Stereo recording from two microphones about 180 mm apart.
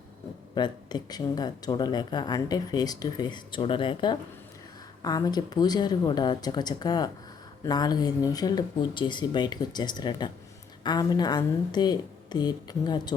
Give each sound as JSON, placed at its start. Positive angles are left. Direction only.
{"t": 0.5, "sound": "speech", "side_deg": 25}